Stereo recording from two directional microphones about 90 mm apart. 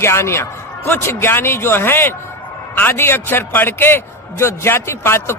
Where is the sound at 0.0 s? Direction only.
30° left (ahead or behind).